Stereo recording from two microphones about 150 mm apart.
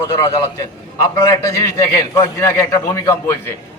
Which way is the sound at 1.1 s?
20° left (ahead or behind).